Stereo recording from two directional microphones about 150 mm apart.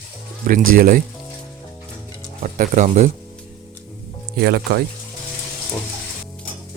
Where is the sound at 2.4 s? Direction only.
60° right (ahead or behind).